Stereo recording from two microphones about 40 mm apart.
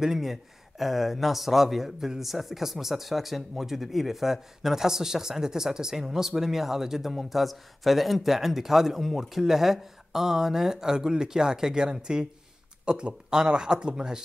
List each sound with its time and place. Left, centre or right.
0.0 s speech: centre